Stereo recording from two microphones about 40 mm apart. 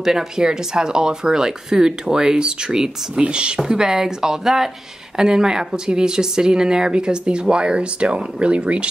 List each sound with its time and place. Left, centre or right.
0.0 s speech: centre; by 8.8 s right